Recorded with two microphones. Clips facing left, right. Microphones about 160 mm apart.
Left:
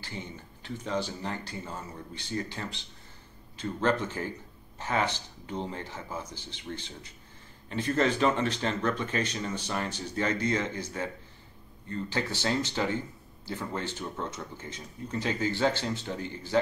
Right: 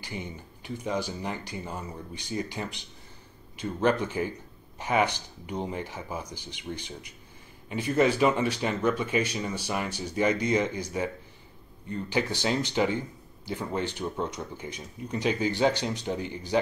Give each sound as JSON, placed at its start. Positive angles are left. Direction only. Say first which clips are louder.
{"t": 0.0, "sound": "speech", "louder": "right 3 dB", "side_deg": -15}